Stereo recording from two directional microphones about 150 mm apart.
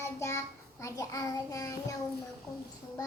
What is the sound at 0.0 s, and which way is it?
Child singing, 20° left (ahead or behind).